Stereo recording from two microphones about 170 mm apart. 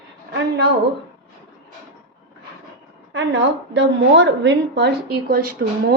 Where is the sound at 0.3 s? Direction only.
85° right.